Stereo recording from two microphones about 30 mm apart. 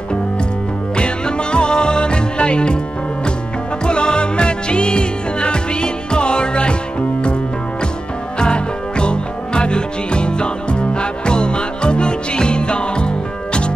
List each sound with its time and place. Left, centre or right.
0.9 s music: left
3.8 s music: left
8.4 s music: left